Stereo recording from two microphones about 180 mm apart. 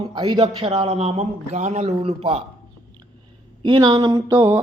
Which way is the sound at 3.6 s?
25° right (ahead or behind).